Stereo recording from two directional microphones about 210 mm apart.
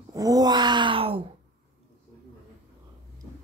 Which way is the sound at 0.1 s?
15° right (ahead or behind).